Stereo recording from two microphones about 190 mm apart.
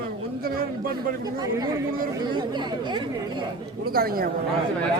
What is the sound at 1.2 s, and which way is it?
Speech, 20° right (ahead or behind).